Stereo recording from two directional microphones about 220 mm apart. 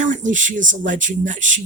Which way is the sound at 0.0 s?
35° right (ahead or behind).